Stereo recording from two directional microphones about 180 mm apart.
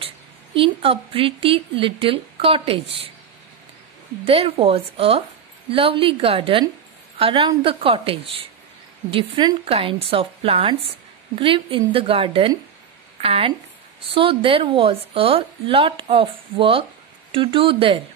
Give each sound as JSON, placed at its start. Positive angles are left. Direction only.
{"t": 0.6, "sound": "a woman's voice", "side_deg": -30}
{"t": 4.3, "sound": "a woman's voice", "side_deg": -30}